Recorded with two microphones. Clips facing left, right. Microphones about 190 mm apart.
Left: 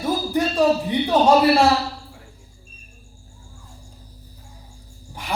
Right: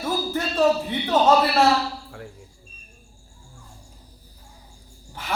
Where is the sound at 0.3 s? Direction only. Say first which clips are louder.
Left 2 dB; 15° left (ahead or behind).